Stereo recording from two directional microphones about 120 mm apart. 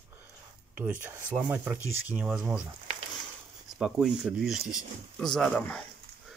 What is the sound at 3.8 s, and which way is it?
Speech, 5° right (ahead or behind).